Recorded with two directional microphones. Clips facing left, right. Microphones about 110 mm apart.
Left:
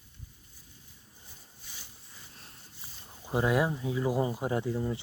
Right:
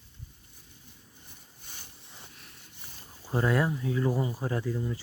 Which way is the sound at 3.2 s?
10° left (ahead or behind).